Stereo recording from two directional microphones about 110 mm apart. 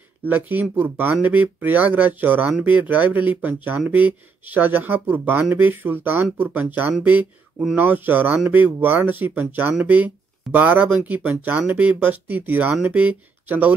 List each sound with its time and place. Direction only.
0.3 s speech: 15° right (ahead or behind)